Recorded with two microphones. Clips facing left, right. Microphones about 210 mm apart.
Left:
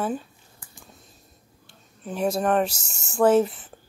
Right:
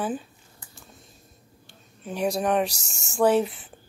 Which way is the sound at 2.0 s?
Centre (ahead or behind).